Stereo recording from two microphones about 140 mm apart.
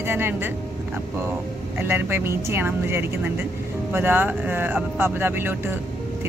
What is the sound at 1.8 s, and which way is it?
A woman's voice, 15° right (ahead or behind).